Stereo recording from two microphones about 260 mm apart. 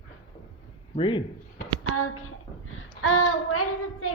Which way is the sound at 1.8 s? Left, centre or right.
Left.